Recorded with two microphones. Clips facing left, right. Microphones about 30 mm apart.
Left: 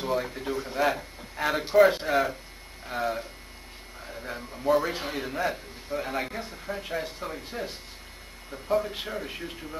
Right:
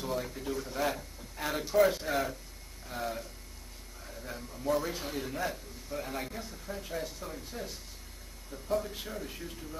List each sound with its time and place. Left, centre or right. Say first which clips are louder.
0.0 s a man's voice: left 6 dB; left